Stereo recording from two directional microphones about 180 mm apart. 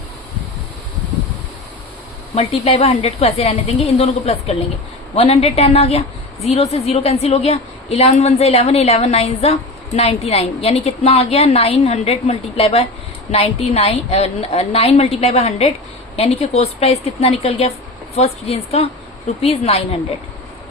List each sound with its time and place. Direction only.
2.3 s a woman's voice: 35° left (ahead or behind)